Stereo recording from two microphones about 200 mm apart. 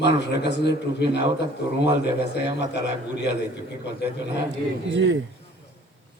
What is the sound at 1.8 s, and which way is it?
Speech, 60° left (ahead or behind).